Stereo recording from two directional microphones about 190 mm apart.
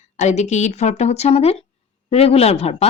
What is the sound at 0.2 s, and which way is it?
A woman's voice, 40° left (ahead or behind).